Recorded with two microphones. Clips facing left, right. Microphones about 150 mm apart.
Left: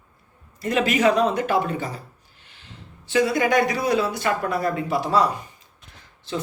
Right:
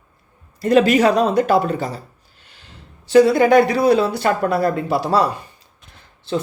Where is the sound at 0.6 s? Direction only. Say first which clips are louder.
Right 6 dB; 35° right (ahead or behind).